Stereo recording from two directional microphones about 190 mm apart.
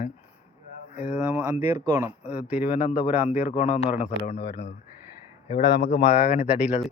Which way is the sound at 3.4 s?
35° left (ahead or behind).